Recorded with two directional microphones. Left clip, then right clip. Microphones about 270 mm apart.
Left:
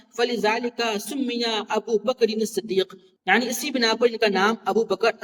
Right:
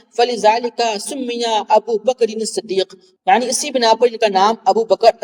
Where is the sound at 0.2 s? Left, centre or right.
Centre.